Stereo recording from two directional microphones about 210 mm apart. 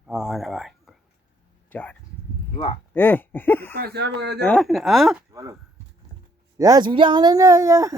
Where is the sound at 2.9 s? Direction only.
10° left (ahead or behind).